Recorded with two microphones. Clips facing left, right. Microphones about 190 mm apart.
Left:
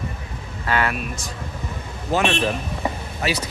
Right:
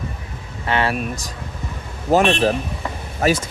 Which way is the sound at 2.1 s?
40° right (ahead or behind).